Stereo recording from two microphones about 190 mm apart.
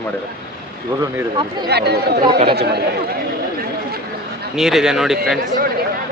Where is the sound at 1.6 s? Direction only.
60° right (ahead or behind).